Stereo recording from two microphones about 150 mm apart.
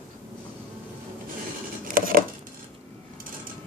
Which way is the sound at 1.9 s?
70° right (ahead or behind).